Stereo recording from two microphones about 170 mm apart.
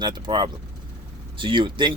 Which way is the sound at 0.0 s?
25° right (ahead or behind).